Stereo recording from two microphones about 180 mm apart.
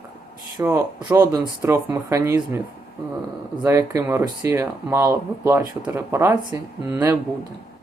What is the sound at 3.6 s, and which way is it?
Speech, 15° right (ahead or behind).